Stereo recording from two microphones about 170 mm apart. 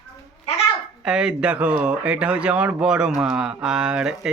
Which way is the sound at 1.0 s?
5° right (ahead or behind).